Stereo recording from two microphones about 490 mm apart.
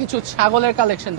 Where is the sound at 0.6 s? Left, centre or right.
Right.